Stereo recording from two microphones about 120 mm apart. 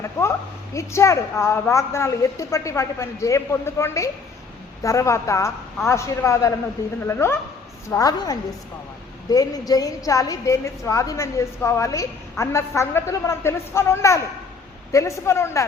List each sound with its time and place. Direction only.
0.0 s a woman's voice: 25° left (ahead or behind)